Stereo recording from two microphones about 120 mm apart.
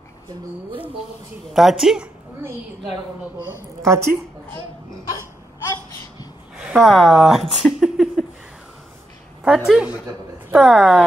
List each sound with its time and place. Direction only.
1.5 s speech: centre (ahead or behind)
3.8 s a woman's voice: 25° right (ahead or behind)
6.5 s speech: 5° right (ahead or behind)
9.7 s a woman's voice: 10° right (ahead or behind)